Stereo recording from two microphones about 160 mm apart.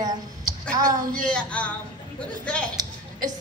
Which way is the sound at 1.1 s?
5° left (ahead or behind).